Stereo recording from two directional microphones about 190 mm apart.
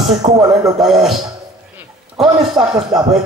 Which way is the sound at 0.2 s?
35° right (ahead or behind).